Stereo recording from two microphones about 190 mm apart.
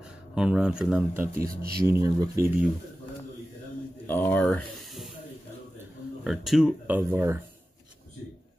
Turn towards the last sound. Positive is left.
turn(degrees=-10)  # may be behind; listen again after turning